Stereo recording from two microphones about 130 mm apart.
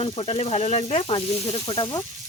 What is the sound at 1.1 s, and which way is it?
Speech, 45° left (ahead or behind).